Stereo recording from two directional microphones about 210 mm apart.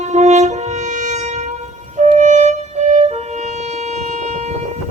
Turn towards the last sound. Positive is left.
turn(degrees=-35)  # may be behind; listen again after turning